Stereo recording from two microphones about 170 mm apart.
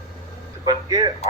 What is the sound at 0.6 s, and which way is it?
Speech, 25° right (ahead or behind).